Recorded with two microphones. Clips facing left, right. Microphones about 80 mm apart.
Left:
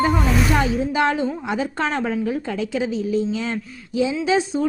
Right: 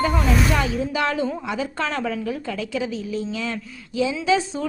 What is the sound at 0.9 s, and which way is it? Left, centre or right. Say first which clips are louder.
A woman's voice: left 3 dB; left.